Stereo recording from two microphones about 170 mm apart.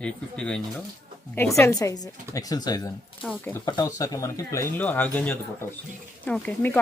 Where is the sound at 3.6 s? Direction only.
20° left (ahead or behind).